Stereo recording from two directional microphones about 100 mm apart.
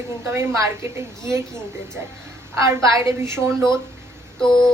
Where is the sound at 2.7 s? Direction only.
30° right (ahead or behind).